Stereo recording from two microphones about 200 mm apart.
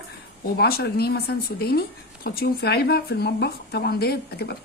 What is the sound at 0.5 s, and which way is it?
A woman's voice, 55° left (ahead or behind).